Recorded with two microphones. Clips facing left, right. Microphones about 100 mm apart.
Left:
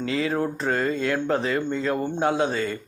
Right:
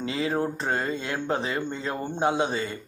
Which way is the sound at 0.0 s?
25° right (ahead or behind).